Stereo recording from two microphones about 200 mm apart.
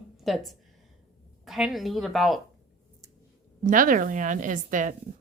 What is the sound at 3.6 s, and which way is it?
A woman's voice, 40° right (ahead or behind).